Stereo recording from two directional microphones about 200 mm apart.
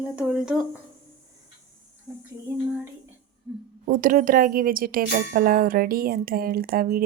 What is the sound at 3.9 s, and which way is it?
Speech, 45° right (ahead or behind).